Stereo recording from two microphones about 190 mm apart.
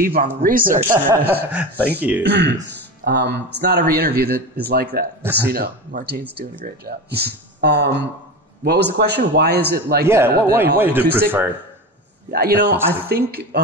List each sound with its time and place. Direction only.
0.0 s speech: 50° right (ahead or behind)
0.7 s speech: 15° right (ahead or behind)
2.2 s speech: 60° right (ahead or behind)
10.0 s speech: 15° right (ahead or behind)
12.3 s speech: 55° right (ahead or behind)